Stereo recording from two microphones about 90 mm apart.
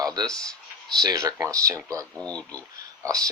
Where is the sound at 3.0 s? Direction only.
40° right (ahead or behind).